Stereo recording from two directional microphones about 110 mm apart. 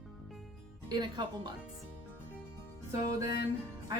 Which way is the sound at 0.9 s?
40° right (ahead or behind).